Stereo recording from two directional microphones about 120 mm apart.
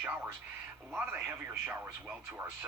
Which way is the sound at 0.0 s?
15° right (ahead or behind).